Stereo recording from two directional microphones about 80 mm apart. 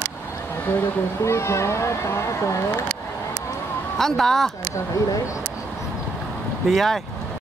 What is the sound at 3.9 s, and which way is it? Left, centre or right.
Speech, centre.